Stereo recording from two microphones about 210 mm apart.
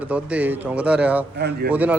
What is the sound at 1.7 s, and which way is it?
Speech, 5° right (ahead or behind).